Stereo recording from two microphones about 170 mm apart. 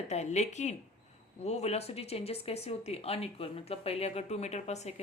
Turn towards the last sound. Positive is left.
turn(degrees=40)  # may be behind; listen again after turning